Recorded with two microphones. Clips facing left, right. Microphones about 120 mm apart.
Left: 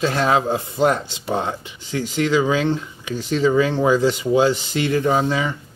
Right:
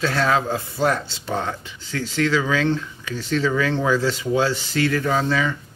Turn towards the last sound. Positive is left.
turn(degrees=20)  # may be behind; listen again after turning